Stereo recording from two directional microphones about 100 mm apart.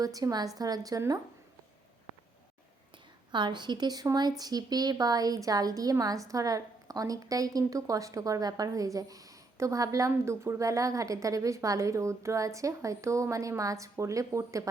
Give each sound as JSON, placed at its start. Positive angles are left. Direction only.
{"t": 0.0, "sound": "speech", "side_deg": -40}
{"t": 3.3, "sound": "speech", "side_deg": -50}